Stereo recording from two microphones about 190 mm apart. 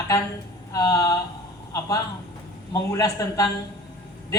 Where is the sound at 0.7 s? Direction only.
20° left (ahead or behind).